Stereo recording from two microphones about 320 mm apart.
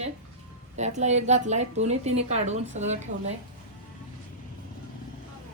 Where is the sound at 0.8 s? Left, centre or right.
Right.